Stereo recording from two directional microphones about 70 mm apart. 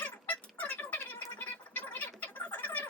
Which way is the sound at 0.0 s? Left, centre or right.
Left.